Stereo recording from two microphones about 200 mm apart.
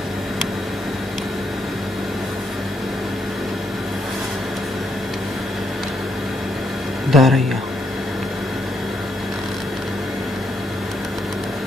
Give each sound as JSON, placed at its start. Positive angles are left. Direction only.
{"t": 7.1, "sound": "speech", "side_deg": 0}